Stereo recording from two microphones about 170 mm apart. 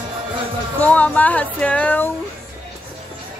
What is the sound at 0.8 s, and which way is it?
Speech, 10° left (ahead or behind).